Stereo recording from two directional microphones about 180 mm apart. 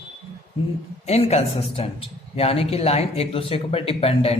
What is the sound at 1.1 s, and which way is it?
Speech, 35° left (ahead or behind).